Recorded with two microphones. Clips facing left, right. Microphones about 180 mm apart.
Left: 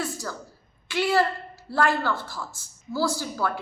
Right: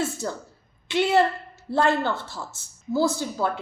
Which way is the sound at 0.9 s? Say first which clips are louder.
Right 3 dB; 20° right (ahead or behind).